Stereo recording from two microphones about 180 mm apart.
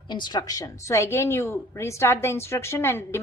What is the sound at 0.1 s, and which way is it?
A woman's voice, 25° left (ahead or behind).